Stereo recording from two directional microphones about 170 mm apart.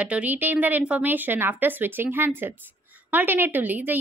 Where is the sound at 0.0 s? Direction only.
10° right (ahead or behind).